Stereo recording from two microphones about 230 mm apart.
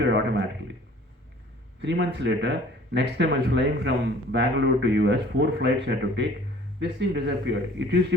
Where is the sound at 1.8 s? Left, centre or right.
Right.